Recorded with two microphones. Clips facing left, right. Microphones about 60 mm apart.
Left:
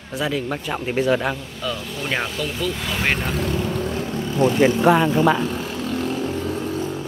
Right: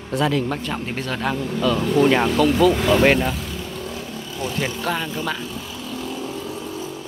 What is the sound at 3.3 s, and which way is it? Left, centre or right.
Vehicle, left.